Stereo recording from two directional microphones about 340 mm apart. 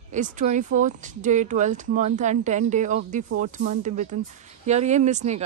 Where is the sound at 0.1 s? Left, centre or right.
Right.